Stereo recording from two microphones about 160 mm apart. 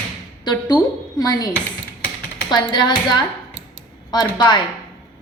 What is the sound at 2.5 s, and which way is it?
A woman's voice, 30° left (ahead or behind).